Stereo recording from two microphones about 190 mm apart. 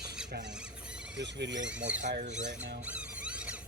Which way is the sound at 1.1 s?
70° right (ahead or behind).